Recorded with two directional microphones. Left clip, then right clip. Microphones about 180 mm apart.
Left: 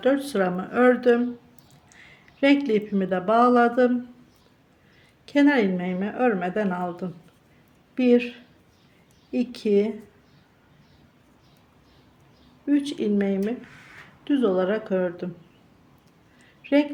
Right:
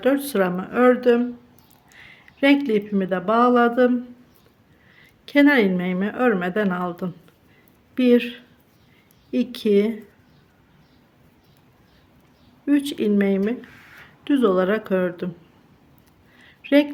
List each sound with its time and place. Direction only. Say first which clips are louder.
0.0 s speech: right 2 dB; 20° right (ahead or behind)
5.2 s speech: right 4 dB; 20° right (ahead or behind)
12.6 s speech: right 3 dB; 25° right (ahead or behind)
16.4 s a sound: right 4 dB; 25° right (ahead or behind)